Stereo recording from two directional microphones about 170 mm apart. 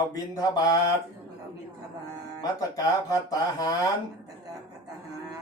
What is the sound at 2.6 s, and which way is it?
Speech, 20° left (ahead or behind).